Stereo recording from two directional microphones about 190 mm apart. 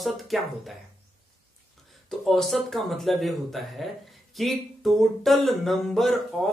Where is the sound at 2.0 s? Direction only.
Centre (ahead or behind).